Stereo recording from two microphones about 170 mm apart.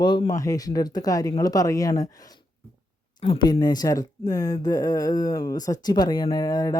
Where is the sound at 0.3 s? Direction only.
20° left (ahead or behind).